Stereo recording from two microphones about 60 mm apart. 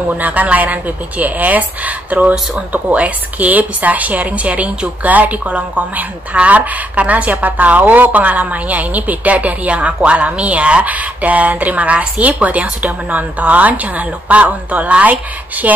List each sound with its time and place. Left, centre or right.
0.1 s speech: right